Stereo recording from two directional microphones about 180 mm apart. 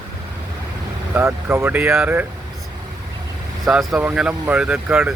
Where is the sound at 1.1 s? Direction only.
15° right (ahead or behind).